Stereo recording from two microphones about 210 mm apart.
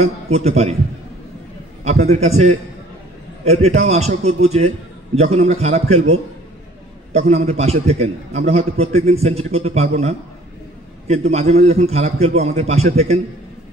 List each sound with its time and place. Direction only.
0.0 s a man's voice: 30° right (ahead or behind)
1.9 s a man's voice: 30° right (ahead or behind)
7.1 s a man's voice: 30° right (ahead or behind)